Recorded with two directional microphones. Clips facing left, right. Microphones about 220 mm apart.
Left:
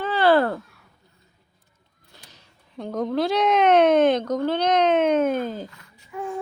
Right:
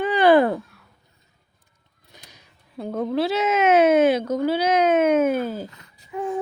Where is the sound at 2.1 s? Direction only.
15° right (ahead or behind).